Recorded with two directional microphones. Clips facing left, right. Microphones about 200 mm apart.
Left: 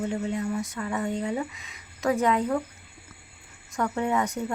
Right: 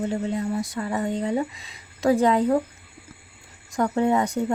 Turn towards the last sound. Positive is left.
turn(degrees=-35)  # may be behind; listen again after turning